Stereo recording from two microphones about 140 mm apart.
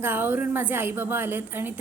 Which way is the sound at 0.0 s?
15° right (ahead or behind).